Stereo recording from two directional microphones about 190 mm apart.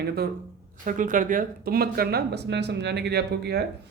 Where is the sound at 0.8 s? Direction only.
45° right (ahead or behind).